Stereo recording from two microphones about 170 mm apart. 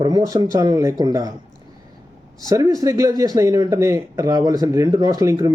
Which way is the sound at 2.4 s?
20° right (ahead or behind).